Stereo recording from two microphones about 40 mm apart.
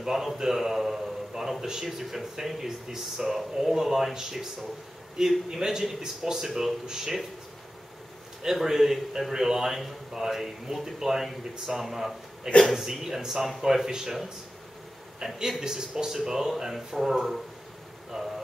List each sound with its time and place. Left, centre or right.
0.0 s a man's voice: centre
8.4 s speech: centre
15.3 s speech: centre